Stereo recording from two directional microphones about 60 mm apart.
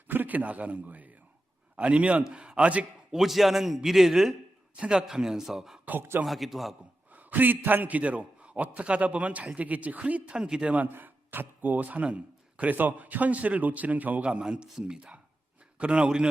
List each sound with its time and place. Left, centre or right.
0.1 s a man's voice: right
3.1 s speech: centre
4.8 s a man's voice: centre
7.1 s a man's voice: right
10.8 s speech: right
14.3 s a man's voice: centre